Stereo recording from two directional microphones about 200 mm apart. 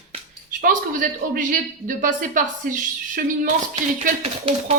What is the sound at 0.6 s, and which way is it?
A woman's voice, 45° right (ahead or behind).